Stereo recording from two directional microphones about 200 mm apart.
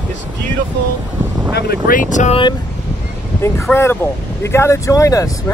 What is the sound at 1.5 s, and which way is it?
Speech, 50° left (ahead or behind).